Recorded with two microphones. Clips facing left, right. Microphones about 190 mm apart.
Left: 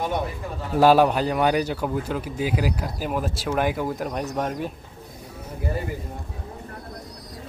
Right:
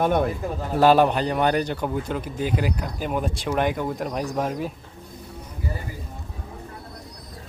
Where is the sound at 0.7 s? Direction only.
5° left (ahead or behind).